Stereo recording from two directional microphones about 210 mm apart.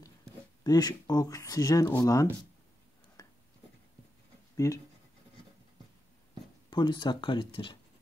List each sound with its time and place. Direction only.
0.7 s speech: 20° left (ahead or behind)
3.2 s writing: 15° left (ahead or behind)
4.6 s speech: 15° left (ahead or behind)
6.7 s speech: 20° left (ahead or behind)